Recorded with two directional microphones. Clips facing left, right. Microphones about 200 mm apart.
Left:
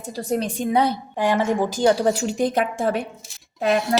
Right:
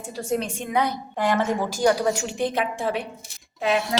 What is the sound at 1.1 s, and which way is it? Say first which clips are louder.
Speech: left 1 dB; 15° left (ahead or behind).